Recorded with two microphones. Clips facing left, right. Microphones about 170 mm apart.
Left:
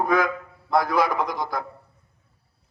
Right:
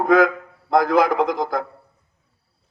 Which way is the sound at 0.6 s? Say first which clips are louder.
Right 5 dB; 55° right (ahead or behind).